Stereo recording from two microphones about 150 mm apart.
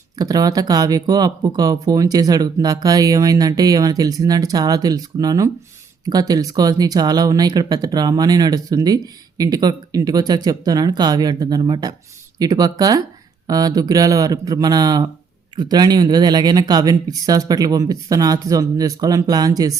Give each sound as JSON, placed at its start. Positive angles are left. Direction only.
{"t": 0.2, "sound": "speech", "side_deg": -25}